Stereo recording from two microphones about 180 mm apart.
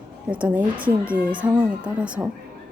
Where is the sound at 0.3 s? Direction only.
10° right (ahead or behind).